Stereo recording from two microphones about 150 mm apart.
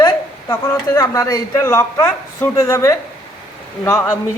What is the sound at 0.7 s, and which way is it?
A man's voice, 20° left (ahead or behind).